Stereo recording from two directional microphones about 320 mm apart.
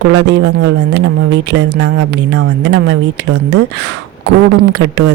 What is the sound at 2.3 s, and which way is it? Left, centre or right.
Speech, right.